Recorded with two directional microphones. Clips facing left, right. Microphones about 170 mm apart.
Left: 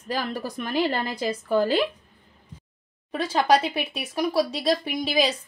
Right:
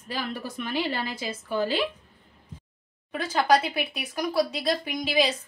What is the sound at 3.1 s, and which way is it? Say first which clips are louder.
Speech: left 2 dB; 35° left (ahead or behind).